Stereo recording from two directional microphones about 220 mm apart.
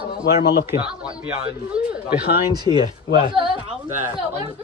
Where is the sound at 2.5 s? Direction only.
20° right (ahead or behind).